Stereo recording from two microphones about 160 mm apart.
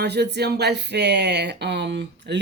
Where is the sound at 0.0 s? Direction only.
90° right.